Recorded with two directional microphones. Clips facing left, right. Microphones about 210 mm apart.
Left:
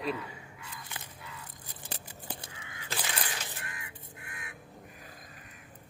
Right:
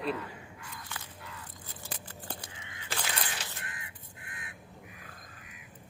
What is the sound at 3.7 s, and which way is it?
Vehicle, 25° right (ahead or behind).